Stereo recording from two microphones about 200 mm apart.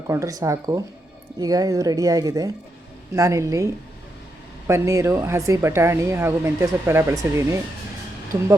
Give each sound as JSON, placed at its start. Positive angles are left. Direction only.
{"t": 0.1, "sound": "speech", "side_deg": -15}